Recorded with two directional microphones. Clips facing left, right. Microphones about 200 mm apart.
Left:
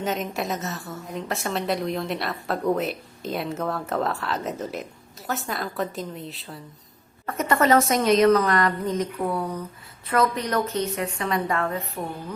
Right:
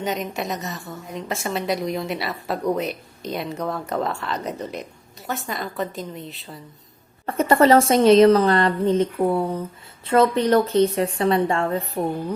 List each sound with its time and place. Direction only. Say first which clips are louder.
0.0 s a woman's voice: right 1 dB; centre (ahead or behind)
7.3 s a woman's voice: right 5 dB; 30° right (ahead or behind)